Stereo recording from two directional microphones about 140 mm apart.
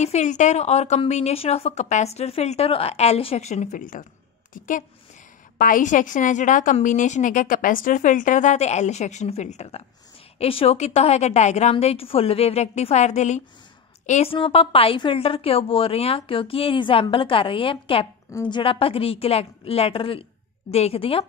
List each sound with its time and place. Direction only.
0.0 s a woman's voice: 55° left (ahead or behind)
14.3 s a woman's voice: 40° left (ahead or behind)